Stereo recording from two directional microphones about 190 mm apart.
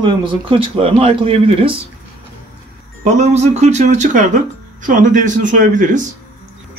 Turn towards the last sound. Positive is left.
turn(degrees=-40)  # may be behind; listen again after turning